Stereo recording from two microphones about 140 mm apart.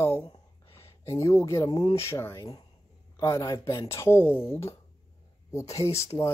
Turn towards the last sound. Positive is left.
turn(degrees=20)  # may be behind; listen again after turning